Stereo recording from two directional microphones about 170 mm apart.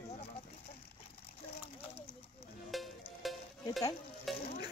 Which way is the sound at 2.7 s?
Centre (ahead or behind).